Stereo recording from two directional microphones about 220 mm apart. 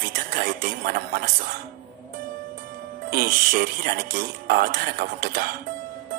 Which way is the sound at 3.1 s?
40° right (ahead or behind).